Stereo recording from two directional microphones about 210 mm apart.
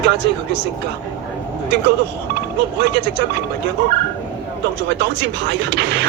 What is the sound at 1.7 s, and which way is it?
Speech, 55° right (ahead or behind).